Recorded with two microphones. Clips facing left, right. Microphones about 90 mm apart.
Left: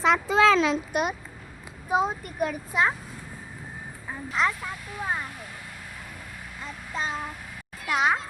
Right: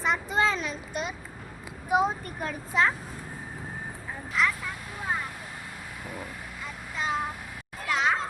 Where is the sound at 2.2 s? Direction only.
15° left (ahead or behind).